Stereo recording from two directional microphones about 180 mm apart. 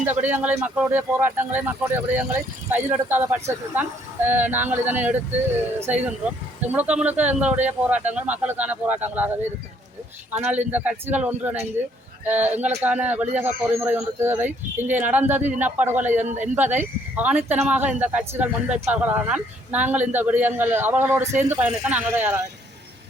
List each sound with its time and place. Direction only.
0.0 s a man's voice: 10° right (ahead or behind)
16.1 s a man's voice: 40° right (ahead or behind)
16.6 s a man's voice: 10° right (ahead or behind)